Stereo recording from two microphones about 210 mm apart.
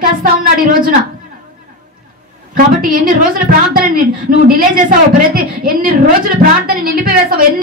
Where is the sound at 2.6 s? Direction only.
40° right (ahead or behind).